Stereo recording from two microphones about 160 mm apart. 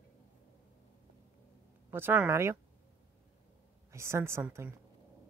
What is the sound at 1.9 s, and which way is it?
Speech, 10° right (ahead or behind).